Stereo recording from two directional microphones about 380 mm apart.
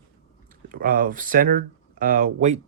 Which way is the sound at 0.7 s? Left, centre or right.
Right.